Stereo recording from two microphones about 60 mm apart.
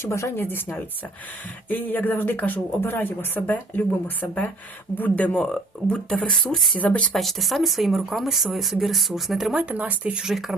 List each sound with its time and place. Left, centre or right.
0.0 s speech: left
0.3 s speech: left; by 6.7 s centre
6.7 s speech: left
7.1 s speech: centre
9.6 s speech: right